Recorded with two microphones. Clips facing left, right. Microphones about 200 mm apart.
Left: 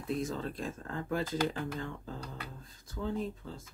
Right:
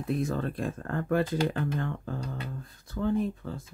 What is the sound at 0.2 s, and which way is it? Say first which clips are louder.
Speech: right 6 dB; 60° right (ahead or behind).